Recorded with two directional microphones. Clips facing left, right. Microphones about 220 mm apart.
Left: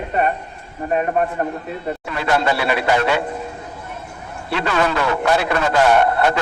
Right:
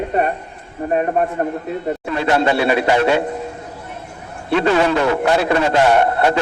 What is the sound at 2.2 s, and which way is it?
A man's voice, 25° right (ahead or behind).